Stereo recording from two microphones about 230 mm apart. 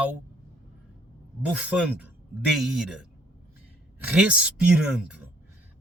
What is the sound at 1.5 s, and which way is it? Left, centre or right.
Speech, centre.